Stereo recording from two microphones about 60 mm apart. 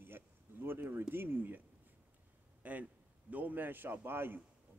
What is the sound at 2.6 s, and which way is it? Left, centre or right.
A man's voice, right.